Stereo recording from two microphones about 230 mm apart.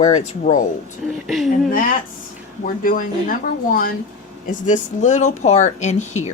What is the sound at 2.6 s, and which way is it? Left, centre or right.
Speech, left.